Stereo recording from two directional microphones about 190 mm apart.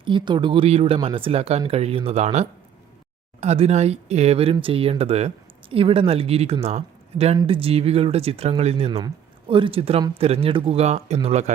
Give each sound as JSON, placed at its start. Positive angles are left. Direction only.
{"t": 0.0, "sound": "speech", "side_deg": -25}